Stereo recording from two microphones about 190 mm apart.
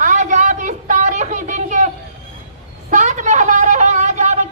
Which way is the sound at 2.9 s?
40° right (ahead or behind).